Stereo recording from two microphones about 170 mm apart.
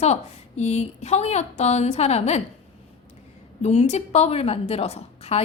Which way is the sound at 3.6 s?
40° left (ahead or behind).